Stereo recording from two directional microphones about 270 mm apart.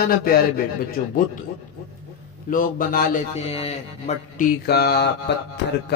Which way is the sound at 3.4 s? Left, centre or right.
Left.